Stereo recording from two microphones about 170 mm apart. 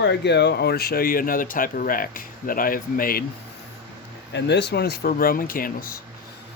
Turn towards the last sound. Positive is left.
turn(degrees=55)  # may be behind; listen again after turning